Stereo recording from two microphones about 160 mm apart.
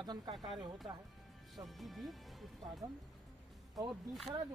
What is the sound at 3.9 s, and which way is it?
Speech, centre (ahead or behind).